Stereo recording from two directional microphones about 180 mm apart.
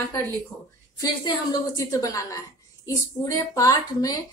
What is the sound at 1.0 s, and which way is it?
A woman's voice, 20° left (ahead or behind).